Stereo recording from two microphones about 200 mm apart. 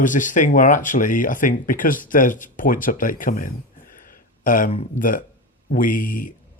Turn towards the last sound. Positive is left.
turn(degrees=45)  # may be behind; listen again after turning